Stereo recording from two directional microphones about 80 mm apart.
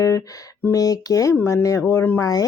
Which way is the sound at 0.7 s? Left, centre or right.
Left.